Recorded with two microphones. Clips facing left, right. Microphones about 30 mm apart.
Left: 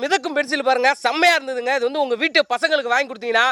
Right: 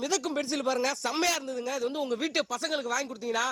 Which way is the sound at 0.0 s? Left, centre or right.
Left.